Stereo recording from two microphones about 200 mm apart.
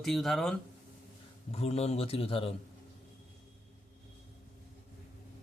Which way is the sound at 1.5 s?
30° left (ahead or behind).